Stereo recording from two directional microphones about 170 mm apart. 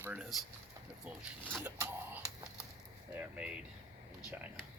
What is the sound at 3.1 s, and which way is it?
Speech, 5° right (ahead or behind).